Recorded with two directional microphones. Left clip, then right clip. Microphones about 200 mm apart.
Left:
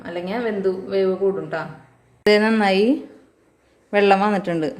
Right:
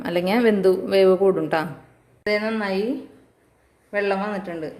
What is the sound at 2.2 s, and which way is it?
Speech, 40° left (ahead or behind).